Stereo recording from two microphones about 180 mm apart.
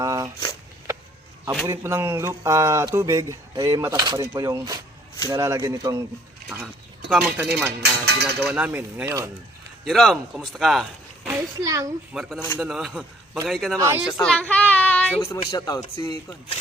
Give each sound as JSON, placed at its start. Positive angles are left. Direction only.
{"t": 0.0, "sound": "a sound", "side_deg": -20}
{"t": 1.6, "sound": "speech", "side_deg": -15}
{"t": 7.1, "sound": "a man's voice", "side_deg": -5}
{"t": 7.8, "sound": "speech", "side_deg": -65}
{"t": 8.4, "sound": "a man's voice", "side_deg": 0}
{"t": 8.6, "sound": "speech", "side_deg": -10}
{"t": 9.8, "sound": "speech", "side_deg": 0}
{"t": 11.3, "sound": "a child's voice", "side_deg": -15}
{"t": 12.1, "sound": "a man's voice", "side_deg": 0}
{"t": 13.7, "sound": "speech", "side_deg": -15}
{"t": 14.0, "sound": "speech", "side_deg": 5}
{"t": 15.4, "sound": "speech", "side_deg": 30}